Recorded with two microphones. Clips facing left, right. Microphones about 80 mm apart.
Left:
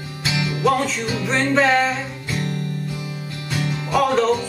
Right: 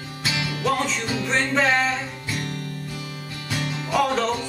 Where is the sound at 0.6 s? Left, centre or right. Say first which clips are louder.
Left 4 dB; centre.